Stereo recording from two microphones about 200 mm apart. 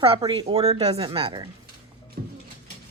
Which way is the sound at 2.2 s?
45° right (ahead or behind).